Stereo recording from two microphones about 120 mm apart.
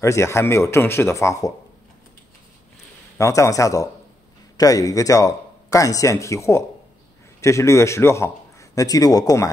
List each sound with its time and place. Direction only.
0.0 s speech: 25° left (ahead or behind)
3.2 s a man's voice: 25° left (ahead or behind)